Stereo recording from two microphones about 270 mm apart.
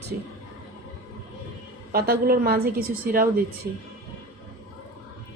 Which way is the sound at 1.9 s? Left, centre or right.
Right.